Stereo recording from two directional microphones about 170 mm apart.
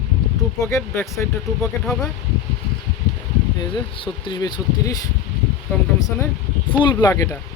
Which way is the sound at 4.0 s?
30° left (ahead or behind).